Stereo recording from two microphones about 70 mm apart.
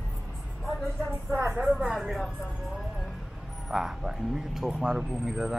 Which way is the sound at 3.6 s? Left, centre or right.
Centre.